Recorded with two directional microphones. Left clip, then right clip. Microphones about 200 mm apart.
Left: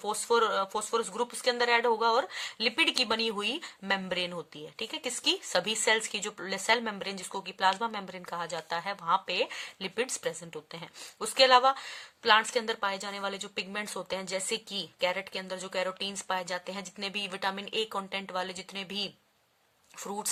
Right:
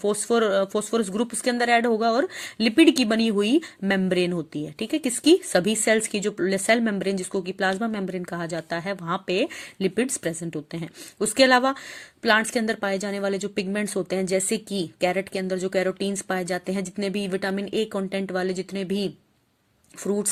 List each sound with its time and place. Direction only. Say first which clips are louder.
0.0 s speech: right 5 dB; 15° right (ahead or behind)